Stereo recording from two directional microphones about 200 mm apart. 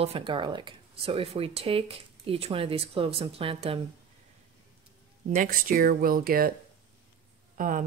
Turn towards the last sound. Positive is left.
turn(degrees=-40)  # may be behind; listen again after turning